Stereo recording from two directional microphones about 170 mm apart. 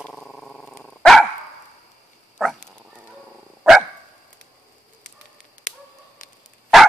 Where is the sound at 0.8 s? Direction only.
Centre (ahead or behind).